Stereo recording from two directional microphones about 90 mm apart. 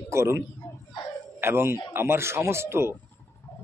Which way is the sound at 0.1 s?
30° right (ahead or behind).